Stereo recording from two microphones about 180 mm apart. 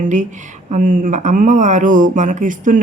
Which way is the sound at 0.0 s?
40° right (ahead or behind).